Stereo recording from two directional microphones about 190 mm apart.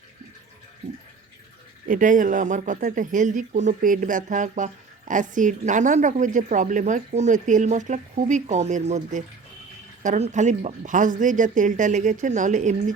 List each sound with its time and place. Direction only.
1.9 s speech: 45° right (ahead or behind)